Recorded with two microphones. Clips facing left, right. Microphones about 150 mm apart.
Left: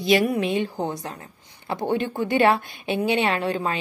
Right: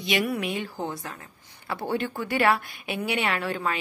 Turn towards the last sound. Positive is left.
turn(degrees=25)  # may be behind; listen again after turning